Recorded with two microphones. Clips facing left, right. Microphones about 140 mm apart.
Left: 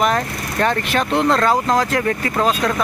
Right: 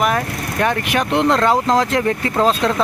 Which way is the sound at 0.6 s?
15° right (ahead or behind).